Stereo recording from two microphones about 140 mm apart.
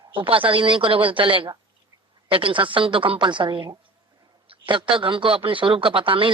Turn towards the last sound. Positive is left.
turn(degrees=-40)  # may be behind; listen again after turning